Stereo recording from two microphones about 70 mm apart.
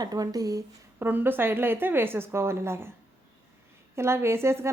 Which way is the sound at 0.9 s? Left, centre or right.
Right.